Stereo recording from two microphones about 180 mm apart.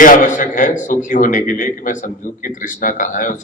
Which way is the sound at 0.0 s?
45° left (ahead or behind).